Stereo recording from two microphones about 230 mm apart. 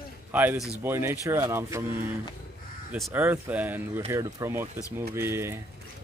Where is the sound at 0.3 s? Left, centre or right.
Centre.